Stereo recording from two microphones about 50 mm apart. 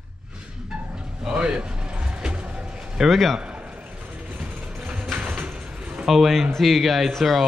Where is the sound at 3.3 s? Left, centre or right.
Right.